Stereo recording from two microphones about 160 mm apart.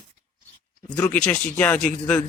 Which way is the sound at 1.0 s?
5° left (ahead or behind).